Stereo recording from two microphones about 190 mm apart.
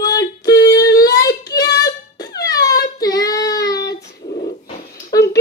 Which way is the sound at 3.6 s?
60° left (ahead or behind).